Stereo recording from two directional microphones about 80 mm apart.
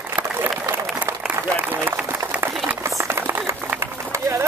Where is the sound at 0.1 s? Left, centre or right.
Right.